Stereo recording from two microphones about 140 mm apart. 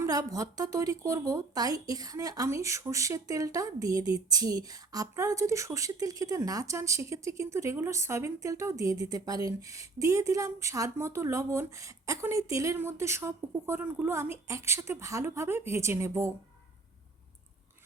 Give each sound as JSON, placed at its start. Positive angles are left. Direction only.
{"t": 0.0, "sound": "speech", "side_deg": -25}